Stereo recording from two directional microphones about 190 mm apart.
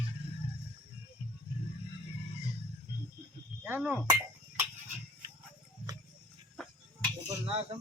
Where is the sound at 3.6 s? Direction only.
10° right (ahead or behind).